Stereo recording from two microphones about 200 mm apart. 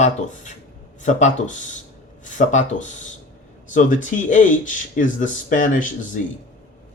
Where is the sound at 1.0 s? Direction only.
40° left (ahead or behind).